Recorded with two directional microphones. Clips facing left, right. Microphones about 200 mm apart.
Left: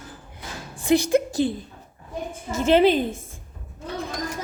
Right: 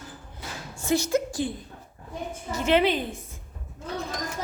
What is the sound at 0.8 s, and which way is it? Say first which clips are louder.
Speech: left 5 dB; 15° left (ahead or behind).